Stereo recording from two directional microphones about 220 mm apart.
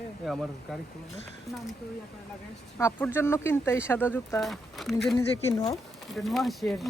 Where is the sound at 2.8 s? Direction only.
15° left (ahead or behind).